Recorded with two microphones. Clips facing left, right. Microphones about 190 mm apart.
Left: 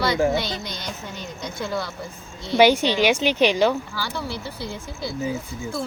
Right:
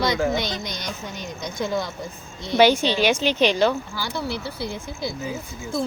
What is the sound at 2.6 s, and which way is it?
A woman's voice, 15° left (ahead or behind).